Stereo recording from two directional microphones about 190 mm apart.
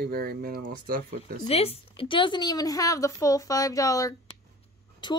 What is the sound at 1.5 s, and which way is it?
A woman's voice, 30° left (ahead or behind).